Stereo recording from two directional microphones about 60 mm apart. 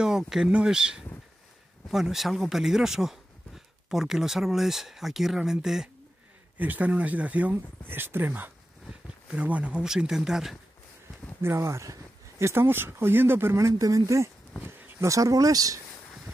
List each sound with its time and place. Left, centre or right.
0.0 s speech: centre
6.6 s speech: right
7.9 s speech: right
9.3 s speech: right; by 10.6 s centre
11.4 s speech: right
13.6 s speech: right